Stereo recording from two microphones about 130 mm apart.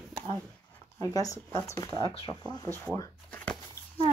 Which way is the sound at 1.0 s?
25° left (ahead or behind).